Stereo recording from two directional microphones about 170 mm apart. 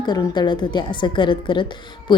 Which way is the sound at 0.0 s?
25° left (ahead or behind).